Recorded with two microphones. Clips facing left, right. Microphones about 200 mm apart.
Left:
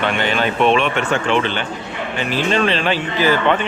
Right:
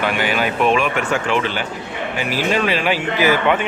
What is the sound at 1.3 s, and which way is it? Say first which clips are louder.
Speech: left 2 dB; 5° right (ahead or behind).